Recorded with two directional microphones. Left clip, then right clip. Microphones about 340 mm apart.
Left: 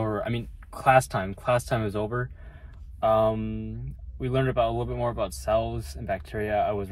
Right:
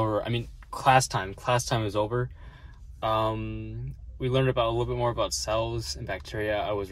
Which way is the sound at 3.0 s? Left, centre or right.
Centre.